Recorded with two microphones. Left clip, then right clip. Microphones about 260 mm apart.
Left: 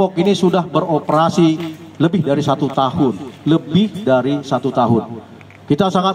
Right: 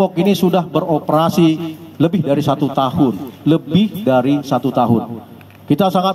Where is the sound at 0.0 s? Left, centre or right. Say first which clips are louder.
Even; right.